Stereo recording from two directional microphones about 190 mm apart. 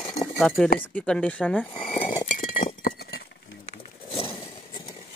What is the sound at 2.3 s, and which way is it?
Chink, 45° left (ahead or behind).